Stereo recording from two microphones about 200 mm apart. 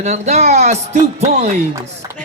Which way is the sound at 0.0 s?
35° right (ahead or behind).